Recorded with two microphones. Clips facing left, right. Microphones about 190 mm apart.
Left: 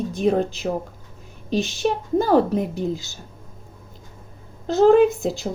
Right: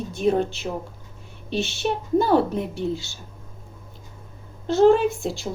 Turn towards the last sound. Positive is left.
turn(degrees=40)  # may be behind; listen again after turning